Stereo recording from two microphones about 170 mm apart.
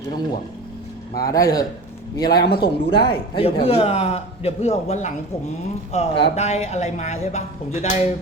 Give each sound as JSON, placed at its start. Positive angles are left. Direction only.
{"t": 1.3, "sound": "a man's voice", "side_deg": 20}
{"t": 2.4, "sound": "speech", "side_deg": 70}
{"t": 3.0, "sound": "a man's voice", "side_deg": 30}